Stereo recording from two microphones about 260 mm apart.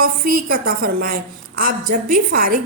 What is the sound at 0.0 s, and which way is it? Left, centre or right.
A woman's voice, right.